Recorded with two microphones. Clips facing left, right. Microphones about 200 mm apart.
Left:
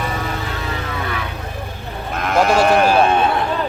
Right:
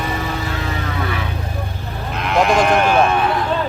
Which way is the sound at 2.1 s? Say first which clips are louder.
Even; 45° left (ahead or behind).